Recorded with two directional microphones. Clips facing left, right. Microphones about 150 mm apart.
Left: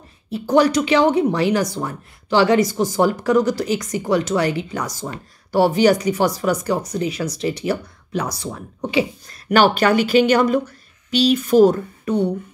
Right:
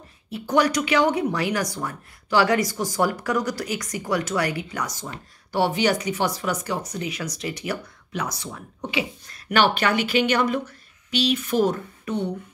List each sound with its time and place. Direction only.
0.3 s speech: 30° left (ahead or behind)